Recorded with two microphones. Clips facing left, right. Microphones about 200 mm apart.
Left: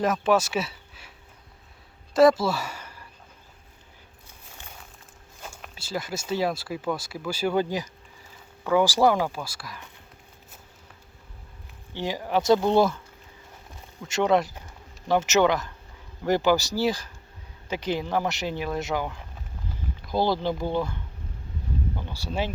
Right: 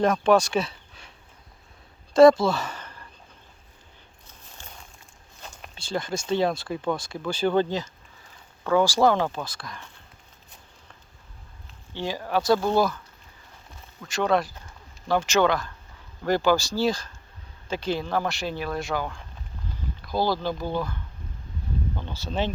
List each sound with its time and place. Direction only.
0.0 s speech: 5° left (ahead or behind)
2.1 s speech: 5° left (ahead or behind)
5.4 s speech: 5° left (ahead or behind)
11.9 s speech: 15° left (ahead or behind)
14.0 s speech: 20° left (ahead or behind)
21.9 s speech: 10° left (ahead or behind)